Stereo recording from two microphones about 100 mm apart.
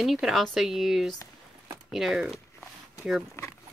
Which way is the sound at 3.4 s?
25° left (ahead or behind).